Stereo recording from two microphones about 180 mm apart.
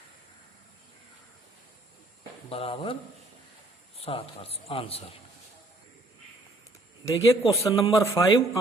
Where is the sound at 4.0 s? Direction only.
35° left (ahead or behind).